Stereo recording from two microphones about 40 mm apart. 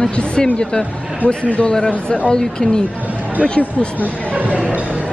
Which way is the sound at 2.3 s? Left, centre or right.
Left.